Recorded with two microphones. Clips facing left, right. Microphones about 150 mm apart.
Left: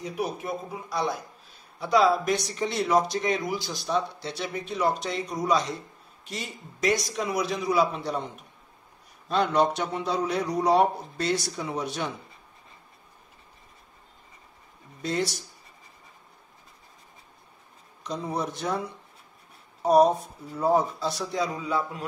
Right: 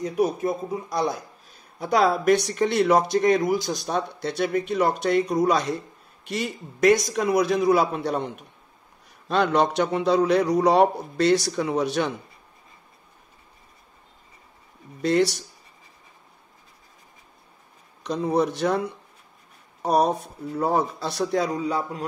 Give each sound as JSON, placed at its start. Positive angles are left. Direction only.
{"t": 0.0, "sound": "speech", "side_deg": -45}
{"t": 1.8, "sound": "speech", "side_deg": -50}
{"t": 9.3, "sound": "a man's voice", "side_deg": -80}
{"t": 15.0, "sound": "a man's voice", "side_deg": -70}
{"t": 18.0, "sound": "a man's voice", "side_deg": -65}
{"t": 20.5, "sound": "speech", "side_deg": -65}
{"t": 21.5, "sound": "a man's voice", "side_deg": -40}